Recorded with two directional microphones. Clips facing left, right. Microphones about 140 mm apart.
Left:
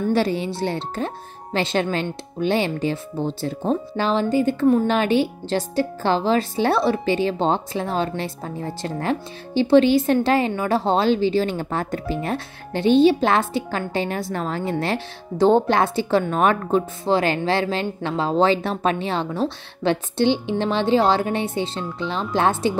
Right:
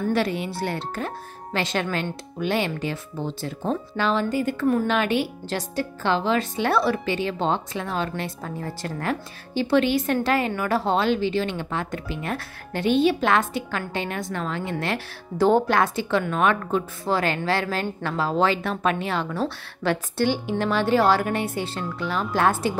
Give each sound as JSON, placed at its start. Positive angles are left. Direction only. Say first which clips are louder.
{"t": 0.1, "sound": "a woman's voice", "louder": "left 3 dB", "side_deg": 30}